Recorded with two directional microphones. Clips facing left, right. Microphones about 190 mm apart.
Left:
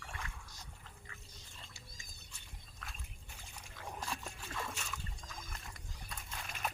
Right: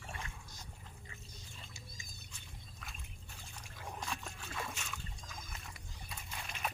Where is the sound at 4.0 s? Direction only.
5° left (ahead or behind).